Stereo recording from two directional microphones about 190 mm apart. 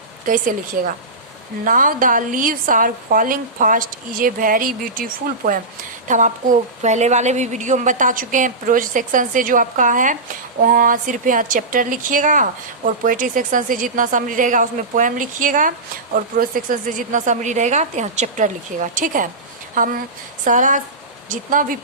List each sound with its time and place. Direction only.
0.3 s a woman's voice: 45° right (ahead or behind)
6.1 s a woman's voice: 40° right (ahead or behind)